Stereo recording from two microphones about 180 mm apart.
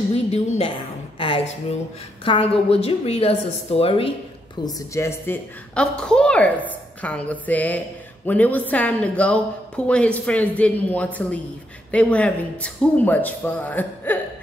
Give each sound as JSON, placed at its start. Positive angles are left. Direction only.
{"t": 0.1, "sound": "a woman's voice", "side_deg": 35}
{"t": 2.2, "sound": "a woman's voice", "side_deg": 30}
{"t": 4.6, "sound": "a woman's voice", "side_deg": 20}